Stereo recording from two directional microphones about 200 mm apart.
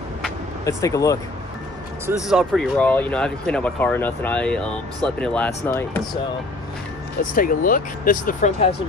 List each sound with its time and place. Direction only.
0.7 s speech: 15° left (ahead or behind)
2.2 s speech: centre (ahead or behind)
7.3 s speech: 45° left (ahead or behind)